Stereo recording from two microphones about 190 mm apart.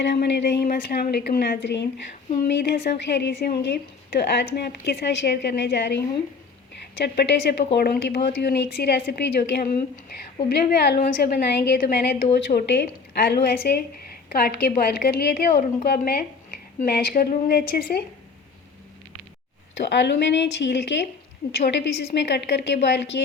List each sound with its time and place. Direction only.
0.0 s a woman's voice: 65° left (ahead or behind)
7.0 s a woman's voice: 60° left (ahead or behind)
12.6 s a woman's voice: 60° left (ahead or behind)
19.7 s a woman's voice: 65° left (ahead or behind)